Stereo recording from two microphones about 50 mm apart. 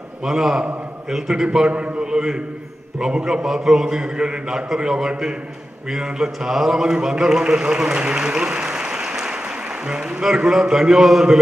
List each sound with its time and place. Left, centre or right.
0.2 s a man's voice: centre
9.1 s applause: centre
9.8 s a man's voice: centre